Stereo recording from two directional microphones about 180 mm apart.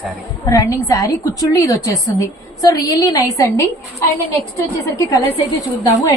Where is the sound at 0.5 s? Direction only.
15° left (ahead or behind).